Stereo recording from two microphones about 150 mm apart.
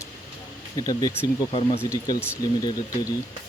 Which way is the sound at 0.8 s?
25° left (ahead or behind).